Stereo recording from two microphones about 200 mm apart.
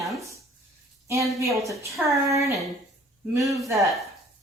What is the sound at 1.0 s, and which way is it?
Speech, 15° right (ahead or behind).